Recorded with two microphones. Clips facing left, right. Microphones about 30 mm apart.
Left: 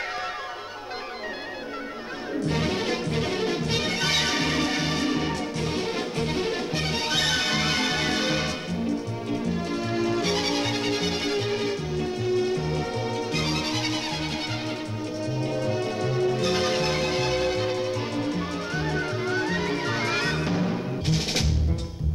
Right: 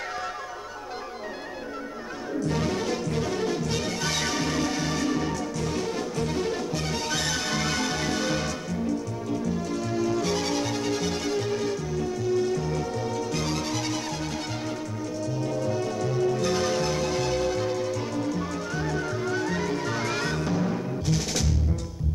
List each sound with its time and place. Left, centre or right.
2.4 s music: left
9.5 s music: left
15.6 s music: left